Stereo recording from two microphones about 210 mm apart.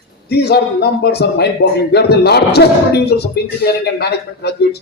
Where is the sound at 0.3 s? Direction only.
50° left (ahead or behind).